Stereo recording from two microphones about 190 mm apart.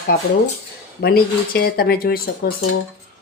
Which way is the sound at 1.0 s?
55° left (ahead or behind).